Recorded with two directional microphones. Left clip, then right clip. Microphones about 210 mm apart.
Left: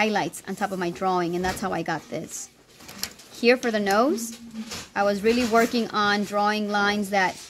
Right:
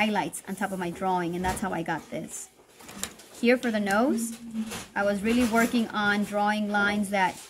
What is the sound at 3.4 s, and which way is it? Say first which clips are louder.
Speech: left 4 dB; 50° left (ahead or behind).